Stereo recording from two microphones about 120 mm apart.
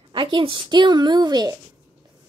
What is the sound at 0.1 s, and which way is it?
Speech, 45° right (ahead or behind).